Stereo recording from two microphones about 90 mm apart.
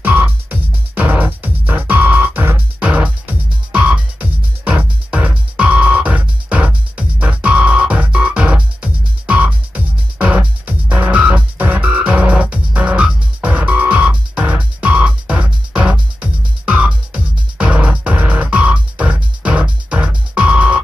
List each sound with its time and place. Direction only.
0.0 s music: 20° right (ahead or behind)